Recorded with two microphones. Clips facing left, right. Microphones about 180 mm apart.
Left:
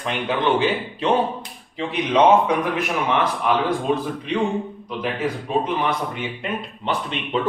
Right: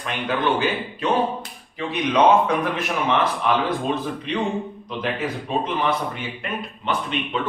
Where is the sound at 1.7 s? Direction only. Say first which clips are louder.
Left 1 dB; 25° left (ahead or behind).